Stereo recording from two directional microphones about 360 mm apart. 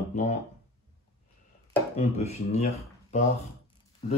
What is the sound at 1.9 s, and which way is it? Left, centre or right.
Speech, centre.